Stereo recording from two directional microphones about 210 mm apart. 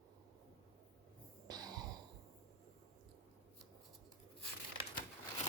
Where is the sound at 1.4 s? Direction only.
20° right (ahead or behind).